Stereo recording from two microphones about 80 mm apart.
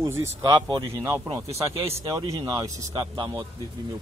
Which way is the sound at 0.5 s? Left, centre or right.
Right.